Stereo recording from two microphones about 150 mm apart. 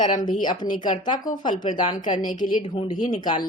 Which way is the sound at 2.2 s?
30° left (ahead or behind).